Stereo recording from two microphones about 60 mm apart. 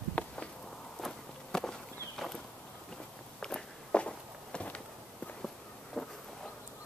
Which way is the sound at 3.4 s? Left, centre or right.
Centre.